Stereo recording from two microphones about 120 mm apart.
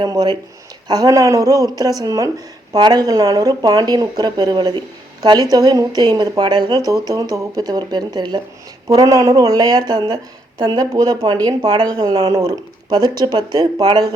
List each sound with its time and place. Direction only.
0.0 s speech: 35° right (ahead or behind)